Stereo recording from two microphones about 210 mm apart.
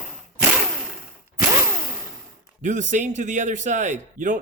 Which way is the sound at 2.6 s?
35° right (ahead or behind).